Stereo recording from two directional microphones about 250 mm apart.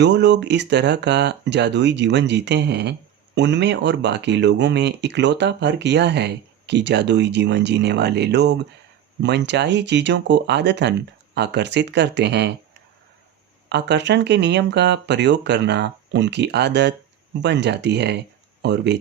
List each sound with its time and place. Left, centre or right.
0.0 s speech: right
13.7 s speech: right